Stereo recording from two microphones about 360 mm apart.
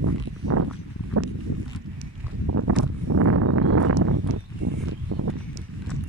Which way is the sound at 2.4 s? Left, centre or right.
Right.